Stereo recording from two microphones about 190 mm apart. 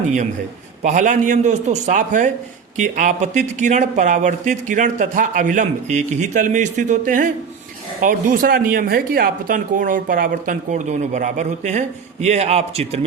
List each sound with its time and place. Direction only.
0.8 s speech: 40° right (ahead or behind)